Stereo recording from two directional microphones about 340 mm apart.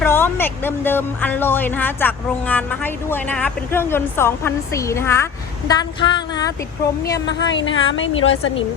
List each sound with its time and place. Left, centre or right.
0.0 s speech: centre
7.3 s a woman's voice: left